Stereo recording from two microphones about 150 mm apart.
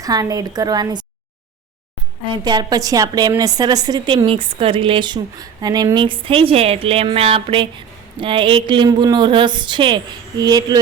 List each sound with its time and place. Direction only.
0.0 s a woman's voice: 25° right (ahead or behind)
2.4 s a woman's voice: 30° right (ahead or behind)